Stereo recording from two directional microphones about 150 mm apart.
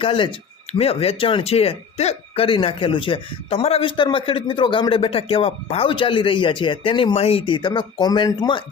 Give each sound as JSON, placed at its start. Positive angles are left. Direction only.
{"t": 0.0, "sound": "speech", "side_deg": 35}